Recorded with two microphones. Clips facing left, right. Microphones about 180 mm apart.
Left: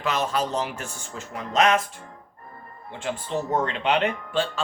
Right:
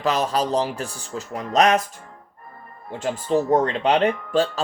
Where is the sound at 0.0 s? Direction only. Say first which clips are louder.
Right 4 dB; 35° right (ahead or behind).